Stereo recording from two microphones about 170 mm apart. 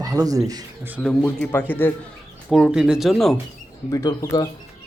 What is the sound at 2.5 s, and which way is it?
Speech, 5° right (ahead or behind).